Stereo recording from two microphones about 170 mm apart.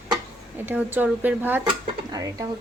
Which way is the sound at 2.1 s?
20° right (ahead or behind).